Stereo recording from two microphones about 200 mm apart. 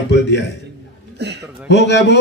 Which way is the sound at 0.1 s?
60° left (ahead or behind).